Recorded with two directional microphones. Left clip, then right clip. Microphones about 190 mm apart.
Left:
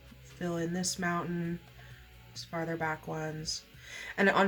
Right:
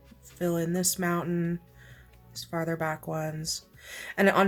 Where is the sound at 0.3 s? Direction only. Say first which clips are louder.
Right 6 dB; 45° right (ahead or behind).